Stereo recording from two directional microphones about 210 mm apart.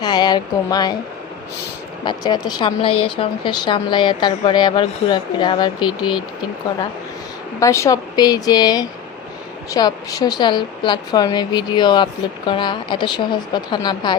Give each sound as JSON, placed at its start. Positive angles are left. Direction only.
{"t": 0.0, "sound": "speech", "side_deg": 20}
{"t": 2.0, "sound": "speech", "side_deg": 20}
{"t": 7.6, "sound": "speech", "side_deg": 15}